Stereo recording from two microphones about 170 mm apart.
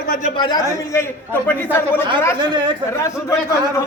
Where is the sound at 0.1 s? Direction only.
45° left (ahead or behind).